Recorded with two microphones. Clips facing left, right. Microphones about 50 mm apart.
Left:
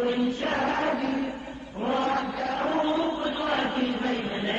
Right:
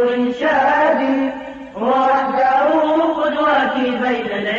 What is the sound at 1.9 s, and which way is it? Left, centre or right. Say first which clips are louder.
Chant: right 12 dB; right.